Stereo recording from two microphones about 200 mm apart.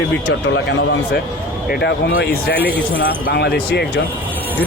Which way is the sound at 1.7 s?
50° left (ahead or behind).